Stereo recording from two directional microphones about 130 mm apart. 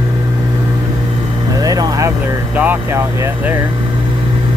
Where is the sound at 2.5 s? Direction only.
15° right (ahead or behind).